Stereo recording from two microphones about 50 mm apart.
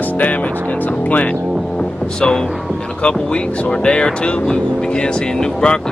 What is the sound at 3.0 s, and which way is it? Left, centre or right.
Speech, centre.